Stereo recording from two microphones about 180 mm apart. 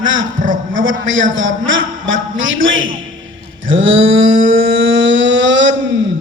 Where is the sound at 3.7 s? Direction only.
90° right.